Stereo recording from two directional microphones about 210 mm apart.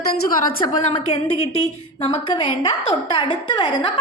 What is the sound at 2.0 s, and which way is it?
A woman's voice, 25° left (ahead or behind).